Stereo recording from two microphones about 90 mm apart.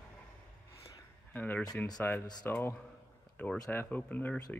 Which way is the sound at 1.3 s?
20° left (ahead or behind).